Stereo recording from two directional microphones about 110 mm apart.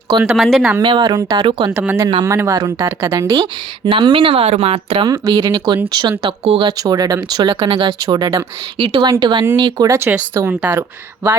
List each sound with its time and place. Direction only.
0.2 s speech: centre (ahead or behind)
0.8 s speech: 45° right (ahead or behind)
2.2 s speech: 30° right (ahead or behind)
3.3 s speech: 45° right (ahead or behind)
5.0 s speech: 35° right (ahead or behind)
6.4 s speech: 65° right (ahead or behind)
6.7 s speech: 35° right (ahead or behind)
10.0 s speech: 20° right (ahead or behind)